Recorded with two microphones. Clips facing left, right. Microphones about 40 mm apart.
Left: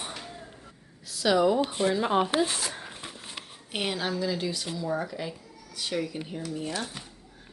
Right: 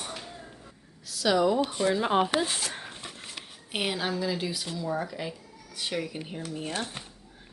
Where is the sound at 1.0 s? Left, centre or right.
Centre.